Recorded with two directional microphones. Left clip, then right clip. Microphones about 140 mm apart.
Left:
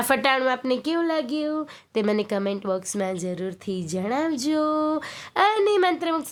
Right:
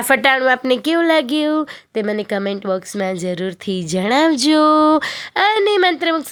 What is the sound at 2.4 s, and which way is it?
Speech, 25° right (ahead or behind).